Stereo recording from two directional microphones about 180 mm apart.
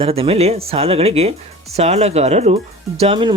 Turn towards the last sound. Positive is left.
turn(degrees=-30)  # may be behind; listen again after turning